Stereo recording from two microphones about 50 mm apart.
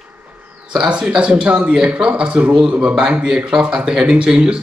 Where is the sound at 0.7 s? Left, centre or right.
Centre.